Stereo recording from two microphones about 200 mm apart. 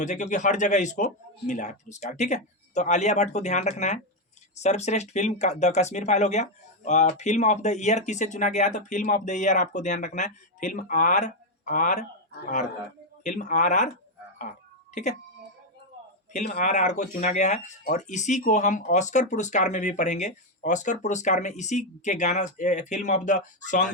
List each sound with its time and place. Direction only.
0.0 s speech: 35° left (ahead or behind)
13.2 s speech: 40° left (ahead or behind)
16.3 s speech: 35° left (ahead or behind)